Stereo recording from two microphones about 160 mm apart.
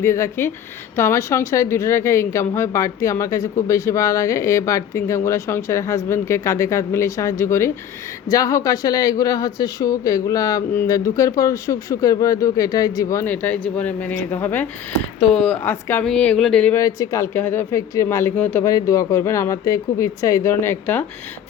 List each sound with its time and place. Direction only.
0.0 s a woman's voice: 15° left (ahead or behind)
16.7 s speech: 20° left (ahead or behind)